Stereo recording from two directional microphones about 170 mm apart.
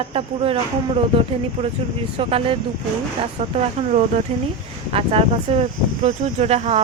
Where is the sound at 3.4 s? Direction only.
40° right (ahead or behind).